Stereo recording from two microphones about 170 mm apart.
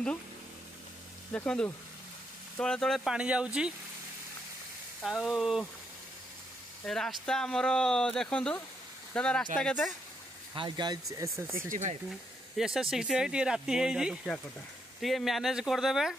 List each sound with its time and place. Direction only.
1.3 s speech: 5° left (ahead or behind)
5.0 s speech: centre (ahead or behind)
6.9 s speech: centre (ahead or behind)
10.5 s speech: 25° right (ahead or behind)
11.7 s speech: 45° right (ahead or behind)
12.5 s speech: 5° right (ahead or behind)